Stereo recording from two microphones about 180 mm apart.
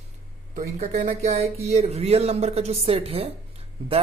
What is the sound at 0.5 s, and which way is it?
Speech, 40° right (ahead or behind).